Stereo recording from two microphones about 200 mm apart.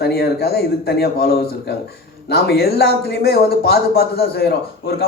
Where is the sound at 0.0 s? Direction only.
50° left (ahead or behind).